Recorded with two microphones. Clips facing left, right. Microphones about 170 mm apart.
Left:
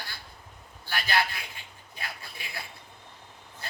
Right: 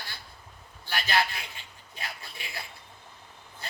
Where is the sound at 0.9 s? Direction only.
20° right (ahead or behind).